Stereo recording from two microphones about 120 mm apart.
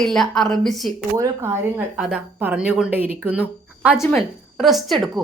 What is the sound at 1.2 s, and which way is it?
Speech, 20° right (ahead or behind).